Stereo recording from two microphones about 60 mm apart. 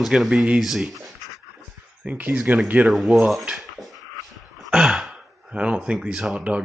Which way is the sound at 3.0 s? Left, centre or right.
Centre.